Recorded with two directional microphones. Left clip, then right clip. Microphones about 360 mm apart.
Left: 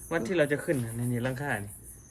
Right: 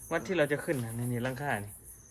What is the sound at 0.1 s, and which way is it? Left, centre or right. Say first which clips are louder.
Speech: left 2 dB; right.